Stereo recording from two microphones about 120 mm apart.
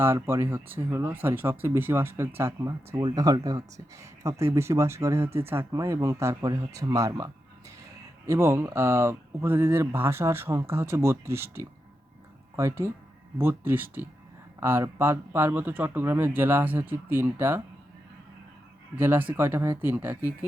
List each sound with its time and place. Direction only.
0.0 s speech: 20° right (ahead or behind)
8.3 s speech: 20° right (ahead or behind)
18.9 s speech: 15° right (ahead or behind)